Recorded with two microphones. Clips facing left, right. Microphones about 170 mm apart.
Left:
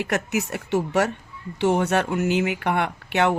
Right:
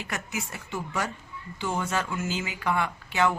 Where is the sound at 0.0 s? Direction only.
70° left (ahead or behind).